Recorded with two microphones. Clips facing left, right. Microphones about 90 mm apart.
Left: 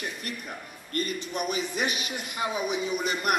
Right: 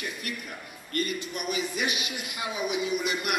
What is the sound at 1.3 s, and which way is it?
A woman's voice, 40° left (ahead or behind).